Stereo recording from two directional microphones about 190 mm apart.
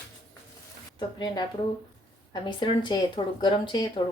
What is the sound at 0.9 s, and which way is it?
A woman's voice, 20° left (ahead or behind).